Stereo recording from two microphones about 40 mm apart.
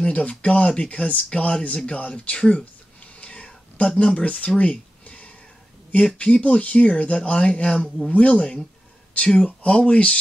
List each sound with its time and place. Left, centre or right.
0.0 s speech: left
4.6 s a sound: left
6.1 s speech: left
7.7 s speech: centre
8.1 s speech: left